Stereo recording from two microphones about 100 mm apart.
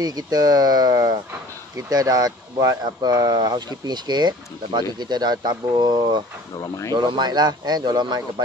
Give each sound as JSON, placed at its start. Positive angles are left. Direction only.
{"t": 0.0, "sound": "speech", "side_deg": -40}